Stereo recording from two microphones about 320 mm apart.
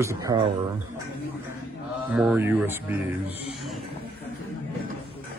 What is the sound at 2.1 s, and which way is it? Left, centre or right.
Speech, centre.